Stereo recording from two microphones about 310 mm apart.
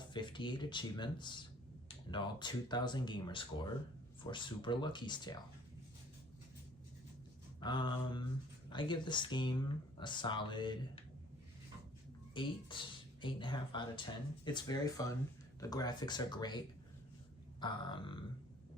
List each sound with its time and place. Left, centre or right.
0.0 s speech: centre
7.6 s speech: centre
12.3 s speech: centre
17.6 s speech: centre